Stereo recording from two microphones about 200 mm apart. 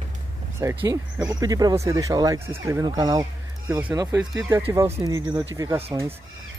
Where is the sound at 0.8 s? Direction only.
15° right (ahead or behind).